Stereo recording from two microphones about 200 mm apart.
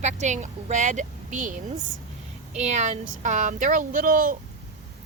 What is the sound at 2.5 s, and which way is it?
Speech, 35° right (ahead or behind).